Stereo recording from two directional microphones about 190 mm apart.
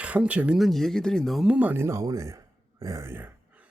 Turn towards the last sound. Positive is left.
turn(degrees=-10)  # may be behind; listen again after turning